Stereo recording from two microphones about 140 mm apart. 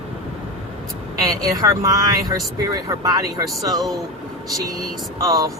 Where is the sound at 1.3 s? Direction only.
25° right (ahead or behind).